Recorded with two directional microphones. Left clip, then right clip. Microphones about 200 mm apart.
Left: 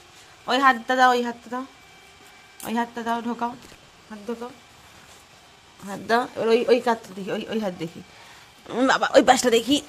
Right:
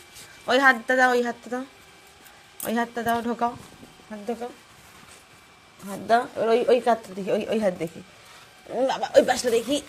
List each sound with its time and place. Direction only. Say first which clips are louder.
0.4 s speech: even; 5° right (ahead or behind)
2.6 s speech: right 1 dB; 5° right (ahead or behind)
5.9 s a woman's voice: right 1 dB; 15° left (ahead or behind)
7.2 s speech: right 4 dB; centre (ahead or behind)
8.7 s speech: left 2 dB; 30° left (ahead or behind)